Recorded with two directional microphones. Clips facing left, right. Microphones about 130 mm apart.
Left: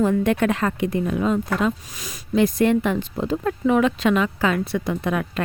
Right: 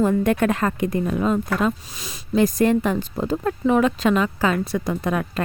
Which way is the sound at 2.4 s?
40° right (ahead or behind).